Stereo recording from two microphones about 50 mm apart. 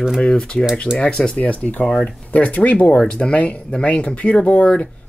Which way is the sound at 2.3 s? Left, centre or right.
Left.